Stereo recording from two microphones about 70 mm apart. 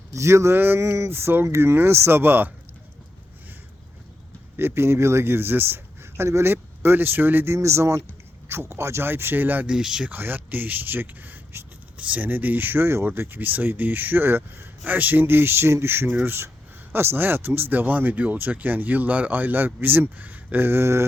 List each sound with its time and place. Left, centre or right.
0.1 s speech: right
0.8 s speech: right
4.5 s speech: right
7.5 s speech: right
9.6 s speech: centre
10.1 s speech: right